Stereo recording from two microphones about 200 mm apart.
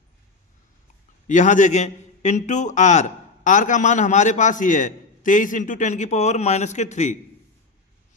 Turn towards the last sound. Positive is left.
turn(degrees=35)  # may be behind; listen again after turning